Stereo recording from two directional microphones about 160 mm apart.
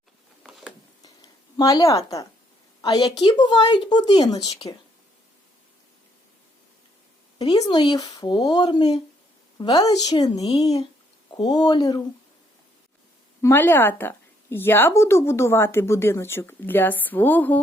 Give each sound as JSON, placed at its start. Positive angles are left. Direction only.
{"t": 0.4, "sound": "a sound", "side_deg": -5}
{"t": 1.5, "sound": "speech", "side_deg": 20}
{"t": 7.3, "sound": "speech", "side_deg": 25}
{"t": 13.4, "sound": "speech", "side_deg": 15}